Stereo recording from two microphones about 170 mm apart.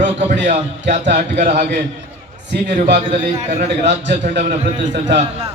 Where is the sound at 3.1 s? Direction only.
40° right (ahead or behind).